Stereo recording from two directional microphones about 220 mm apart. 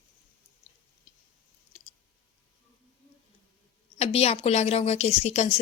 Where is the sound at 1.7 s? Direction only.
30° left (ahead or behind).